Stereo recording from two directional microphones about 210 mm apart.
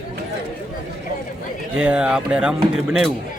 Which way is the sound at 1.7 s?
5° right (ahead or behind).